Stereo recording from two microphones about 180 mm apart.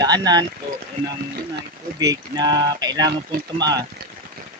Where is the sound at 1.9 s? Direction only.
20° right (ahead or behind).